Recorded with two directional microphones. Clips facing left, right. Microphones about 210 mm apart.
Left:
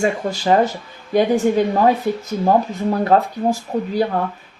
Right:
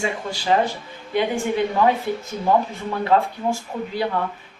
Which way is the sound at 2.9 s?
40° left (ahead or behind).